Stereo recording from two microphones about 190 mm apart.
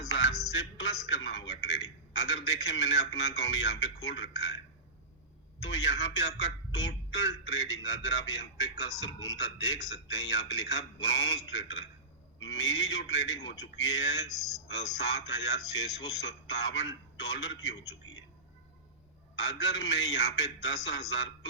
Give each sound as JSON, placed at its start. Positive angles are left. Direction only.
{"t": 0.1, "sound": "a man's voice", "side_deg": 70}
{"t": 5.6, "sound": "a man's voice", "side_deg": 75}
{"t": 19.4, "sound": "a man's voice", "side_deg": 70}